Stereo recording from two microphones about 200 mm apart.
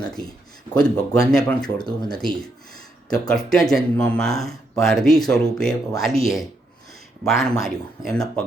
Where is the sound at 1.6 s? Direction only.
20° left (ahead or behind).